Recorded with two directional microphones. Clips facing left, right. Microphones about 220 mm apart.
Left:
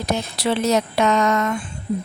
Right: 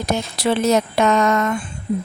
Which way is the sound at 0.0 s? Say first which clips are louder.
Right 2 dB; 50° right (ahead or behind).